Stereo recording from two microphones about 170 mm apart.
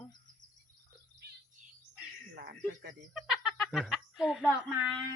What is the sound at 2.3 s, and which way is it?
Music, 70° right (ahead or behind).